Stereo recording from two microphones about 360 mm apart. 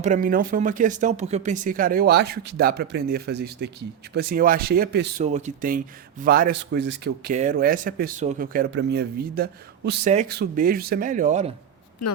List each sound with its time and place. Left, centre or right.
0.0 s a man's voice: right